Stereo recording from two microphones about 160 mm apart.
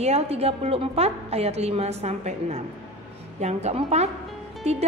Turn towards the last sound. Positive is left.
turn(degrees=-40)  # may be behind; listen again after turning